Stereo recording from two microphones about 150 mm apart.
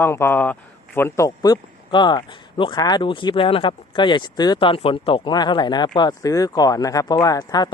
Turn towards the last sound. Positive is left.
turn(degrees=25)  # may be behind; listen again after turning